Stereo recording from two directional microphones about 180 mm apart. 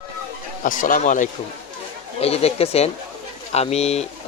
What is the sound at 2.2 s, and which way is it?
Speech, 35° left (ahead or behind).